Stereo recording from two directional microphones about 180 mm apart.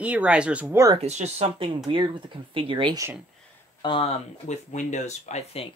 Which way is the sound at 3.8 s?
30° left (ahead or behind).